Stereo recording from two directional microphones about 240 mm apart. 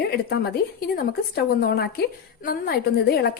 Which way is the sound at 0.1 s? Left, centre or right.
Left.